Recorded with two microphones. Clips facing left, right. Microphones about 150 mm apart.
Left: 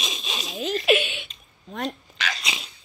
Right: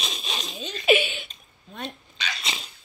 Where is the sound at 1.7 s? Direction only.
90° left.